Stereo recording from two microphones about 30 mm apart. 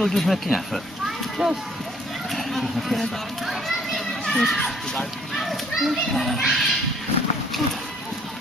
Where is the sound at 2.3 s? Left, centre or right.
Centre.